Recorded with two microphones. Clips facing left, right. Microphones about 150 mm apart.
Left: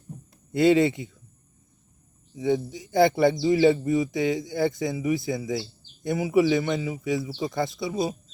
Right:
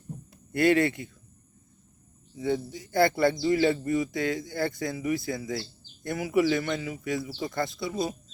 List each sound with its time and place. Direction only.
0.5 s a man's voice: 20° left (ahead or behind)
2.3 s a man's voice: 20° left (ahead or behind)